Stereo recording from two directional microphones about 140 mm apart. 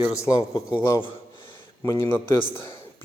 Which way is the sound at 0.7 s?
20° left (ahead or behind).